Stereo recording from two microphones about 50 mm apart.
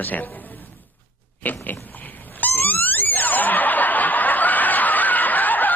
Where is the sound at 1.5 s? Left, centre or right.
Left.